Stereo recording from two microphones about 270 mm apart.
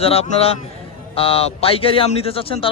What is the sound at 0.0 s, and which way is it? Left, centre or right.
A man's voice, left.